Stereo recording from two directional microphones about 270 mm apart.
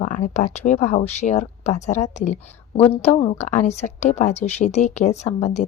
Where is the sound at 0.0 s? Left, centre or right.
Left.